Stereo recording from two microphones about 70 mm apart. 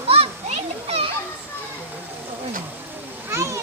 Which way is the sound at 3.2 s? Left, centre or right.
Right.